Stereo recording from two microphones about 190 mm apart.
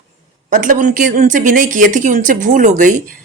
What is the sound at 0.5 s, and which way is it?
A woman's voice, 45° right (ahead or behind).